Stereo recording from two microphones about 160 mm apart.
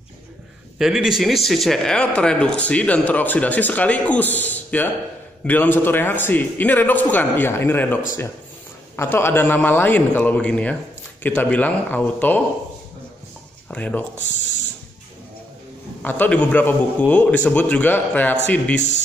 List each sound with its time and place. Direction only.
0.7 s speech: 5° right (ahead or behind)
13.7 s speech: 10° left (ahead or behind)
16.0 s speech: 10° left (ahead or behind)